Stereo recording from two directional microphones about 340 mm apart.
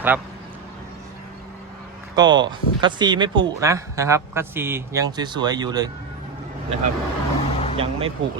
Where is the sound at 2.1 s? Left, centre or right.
Centre.